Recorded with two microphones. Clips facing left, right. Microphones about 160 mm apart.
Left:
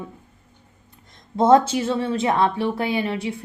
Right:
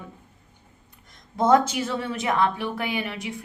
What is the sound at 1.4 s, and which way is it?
A woman's voice, 25° left (ahead or behind).